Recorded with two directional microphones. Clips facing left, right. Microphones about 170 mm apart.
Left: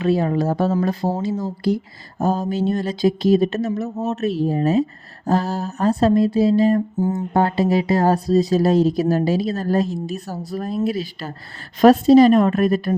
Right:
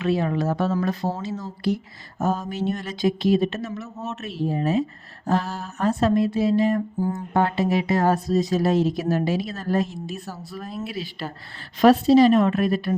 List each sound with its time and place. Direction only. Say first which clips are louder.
0.0 s speech: left 4 dB; 35° left (ahead or behind)
7.0 s speech: left 5 dB; 20° left (ahead or behind)
7.3 s a woman's voice: left 3 dB; 35° left (ahead or behind)